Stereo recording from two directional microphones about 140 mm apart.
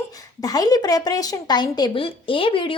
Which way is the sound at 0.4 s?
25° left (ahead or behind).